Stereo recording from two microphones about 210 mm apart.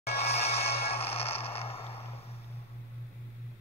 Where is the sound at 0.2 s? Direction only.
30° left (ahead or behind).